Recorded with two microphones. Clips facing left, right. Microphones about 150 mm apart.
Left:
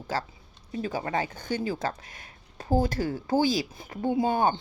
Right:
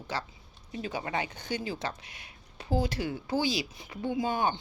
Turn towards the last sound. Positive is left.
turn(degrees=45)  # may be behind; listen again after turning